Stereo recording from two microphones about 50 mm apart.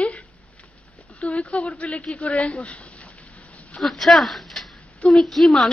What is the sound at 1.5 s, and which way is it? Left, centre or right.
Speech, left.